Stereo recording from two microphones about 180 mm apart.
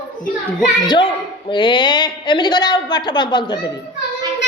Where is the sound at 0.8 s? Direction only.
25° left (ahead or behind).